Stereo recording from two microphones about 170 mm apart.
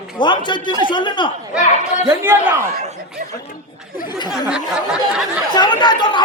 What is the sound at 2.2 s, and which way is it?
Speech, 15° right (ahead or behind).